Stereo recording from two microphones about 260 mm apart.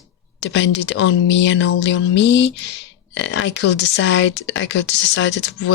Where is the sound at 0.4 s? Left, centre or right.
Left.